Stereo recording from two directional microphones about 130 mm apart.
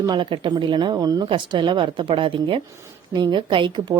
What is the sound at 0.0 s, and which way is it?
A woman's voice, 35° right (ahead or behind).